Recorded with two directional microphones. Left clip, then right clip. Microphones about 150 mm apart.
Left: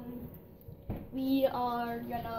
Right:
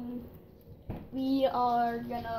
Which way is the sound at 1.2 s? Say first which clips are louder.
Right 3 dB; 55° right (ahead or behind).